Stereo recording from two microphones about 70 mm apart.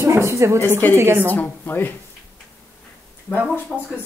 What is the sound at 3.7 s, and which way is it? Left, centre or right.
Speech, centre.